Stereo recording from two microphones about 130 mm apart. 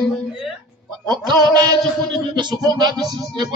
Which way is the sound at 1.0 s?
35° right (ahead or behind).